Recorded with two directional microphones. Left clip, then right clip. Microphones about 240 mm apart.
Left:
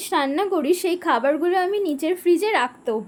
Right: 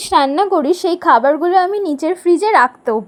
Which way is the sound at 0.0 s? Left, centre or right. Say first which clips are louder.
Right 9 dB; right.